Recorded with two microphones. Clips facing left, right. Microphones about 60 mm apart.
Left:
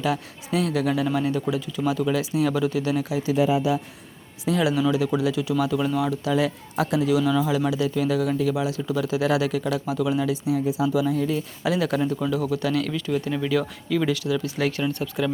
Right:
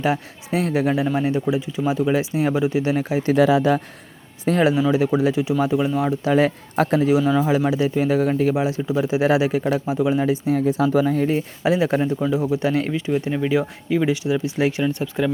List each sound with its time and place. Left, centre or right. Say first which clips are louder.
0.0 s speech: right 4 dB; right
3.3 s speech: right 5 dB; right
4.4 s speech: right 5 dB; right
4.7 s speech: right 3 dB; right
6.3 s speech: right 7 dB; right
10.6 s speech: right 4 dB; right
10.8 s speech: right 3 dB; right; by 15.3 s centre